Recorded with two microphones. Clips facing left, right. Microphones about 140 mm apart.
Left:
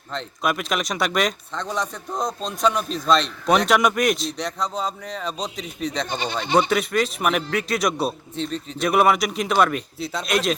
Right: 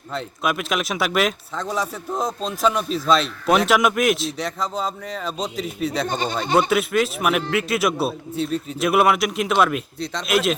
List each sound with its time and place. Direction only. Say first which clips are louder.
0.1 s a man's voice: right 1 dB; 5° right (ahead or behind)
6.1 s speech: right 3 dB; 45° right (ahead or behind)
6.6 s a man's voice: right 1 dB; 5° right (ahead or behind)